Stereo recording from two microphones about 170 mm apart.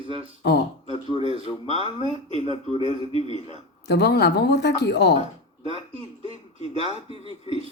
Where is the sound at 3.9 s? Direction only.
80° left.